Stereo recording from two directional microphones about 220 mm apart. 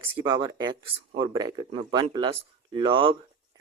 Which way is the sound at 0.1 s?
20° right (ahead or behind).